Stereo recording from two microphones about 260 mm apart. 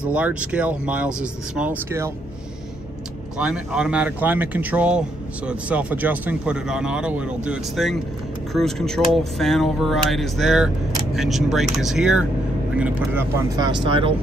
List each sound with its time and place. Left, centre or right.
0.1 s speech: centre
3.3 s speech: centre